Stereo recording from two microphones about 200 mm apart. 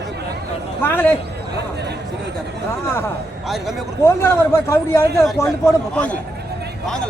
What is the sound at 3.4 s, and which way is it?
Speech, centre (ahead or behind).